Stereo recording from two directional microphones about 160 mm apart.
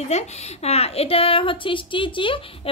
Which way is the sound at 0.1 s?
40° left (ahead or behind).